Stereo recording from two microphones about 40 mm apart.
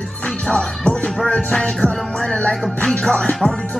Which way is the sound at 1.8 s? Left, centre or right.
Left.